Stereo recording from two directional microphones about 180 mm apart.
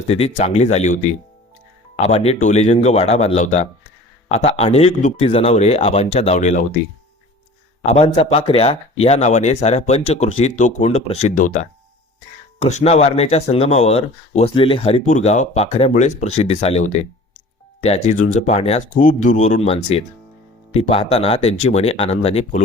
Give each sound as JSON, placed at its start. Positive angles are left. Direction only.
{"t": 0.1, "sound": "speech", "side_deg": 35}
{"t": 7.9, "sound": "speech", "side_deg": 35}